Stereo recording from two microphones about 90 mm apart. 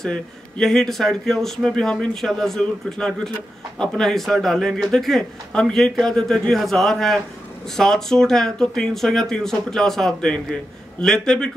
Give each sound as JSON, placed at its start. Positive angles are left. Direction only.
{"t": 0.0, "sound": "a man's voice", "side_deg": 5}